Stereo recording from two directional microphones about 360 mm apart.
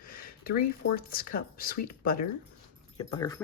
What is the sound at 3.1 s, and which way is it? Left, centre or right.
Speech, centre.